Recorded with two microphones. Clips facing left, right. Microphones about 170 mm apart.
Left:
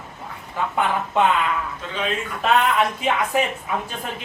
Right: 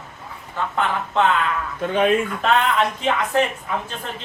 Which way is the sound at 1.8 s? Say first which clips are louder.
Right 8 dB; 55° right (ahead or behind).